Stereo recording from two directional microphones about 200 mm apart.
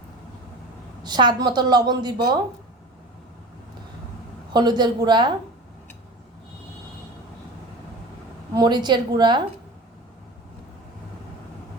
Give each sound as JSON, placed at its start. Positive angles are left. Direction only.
{"t": 1.0, "sound": "a woman's voice", "side_deg": -20}
{"t": 4.5, "sound": "a woman's voice", "side_deg": -20}
{"t": 8.5, "sound": "a woman's voice", "side_deg": -20}